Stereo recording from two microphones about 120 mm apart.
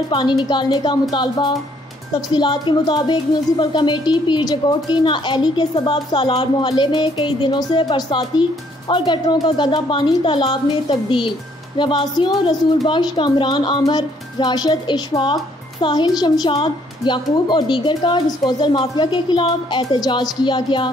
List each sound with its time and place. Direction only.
0.1 s a woman's voice: 40° left (ahead or behind)